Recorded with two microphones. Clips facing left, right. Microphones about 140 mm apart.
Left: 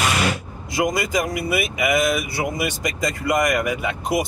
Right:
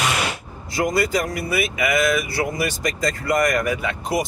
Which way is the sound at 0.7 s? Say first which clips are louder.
Right 1 dB; 15° left (ahead or behind).